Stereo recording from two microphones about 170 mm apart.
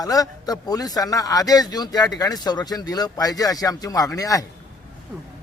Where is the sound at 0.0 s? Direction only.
20° left (ahead or behind).